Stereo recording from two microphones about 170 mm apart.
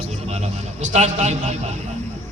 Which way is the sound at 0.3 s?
40° right (ahead or behind).